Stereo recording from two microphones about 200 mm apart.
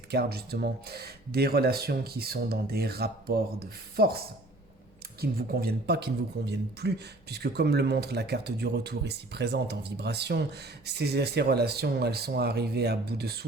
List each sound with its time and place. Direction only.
0.1 s speech: 55° right (ahead or behind)